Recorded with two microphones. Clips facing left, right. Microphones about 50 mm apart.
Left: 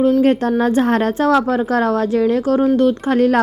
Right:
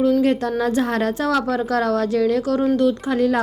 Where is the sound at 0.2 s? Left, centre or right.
Left.